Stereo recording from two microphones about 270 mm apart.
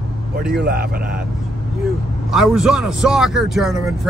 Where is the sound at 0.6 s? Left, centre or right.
Right.